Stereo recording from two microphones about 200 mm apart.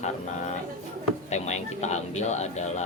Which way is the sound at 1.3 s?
35° left (ahead or behind).